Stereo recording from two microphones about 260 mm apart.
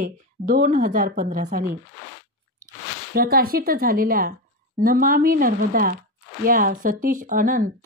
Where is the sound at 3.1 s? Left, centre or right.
Right.